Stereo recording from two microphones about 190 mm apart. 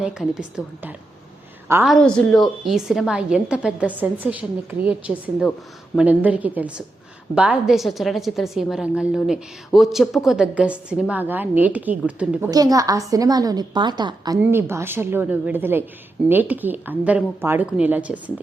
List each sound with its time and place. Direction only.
0.0 s a woman's voice: 5° right (ahead or behind)
1.9 s a woman's voice: 5° left (ahead or behind)
12.5 s a woman's voice: 20° right (ahead or behind)
14.5 s a woman's voice: 10° right (ahead or behind)